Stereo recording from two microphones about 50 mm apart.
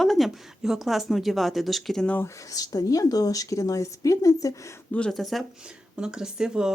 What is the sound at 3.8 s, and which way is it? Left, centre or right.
Speech, left.